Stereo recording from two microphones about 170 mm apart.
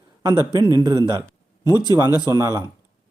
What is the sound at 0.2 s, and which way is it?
A man's voice, 25° right (ahead or behind).